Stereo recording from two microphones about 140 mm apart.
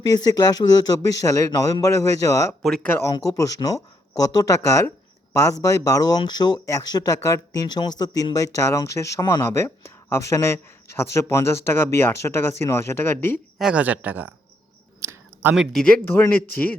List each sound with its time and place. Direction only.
0.3 s speech: 25° left (ahead or behind)
2.6 s speech: centre (ahead or behind)
2.9 s a man's voice: 20° left (ahead or behind)
13.6 s speech: 5° right (ahead or behind)
15.0 s a sound: 15° right (ahead or behind)
15.5 s speech: 5° left (ahead or behind)